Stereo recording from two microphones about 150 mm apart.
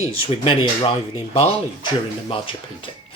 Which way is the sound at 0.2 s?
35° left (ahead or behind).